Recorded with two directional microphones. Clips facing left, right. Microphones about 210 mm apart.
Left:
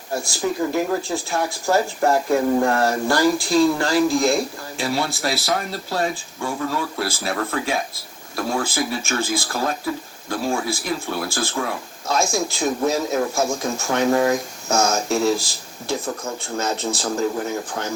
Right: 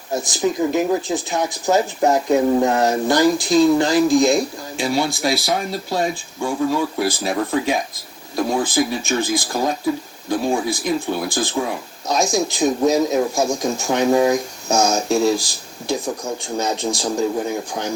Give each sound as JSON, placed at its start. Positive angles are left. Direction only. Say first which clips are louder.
{"t": 0.1, "sound": "speech", "louder": "right 3 dB", "side_deg": -20}